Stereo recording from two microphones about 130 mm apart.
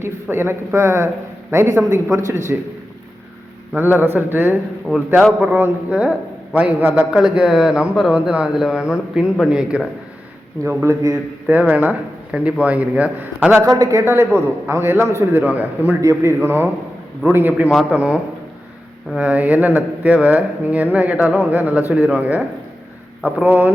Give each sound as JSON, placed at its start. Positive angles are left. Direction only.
{"t": 0.0, "sound": "a man's voice", "side_deg": -20}
{"t": 3.8, "sound": "a man's voice", "side_deg": -15}
{"t": 10.6, "sound": "a man's voice", "side_deg": -20}
{"t": 11.7, "sound": "a man's voice", "side_deg": -10}
{"t": 13.7, "sound": "a man's voice", "side_deg": -25}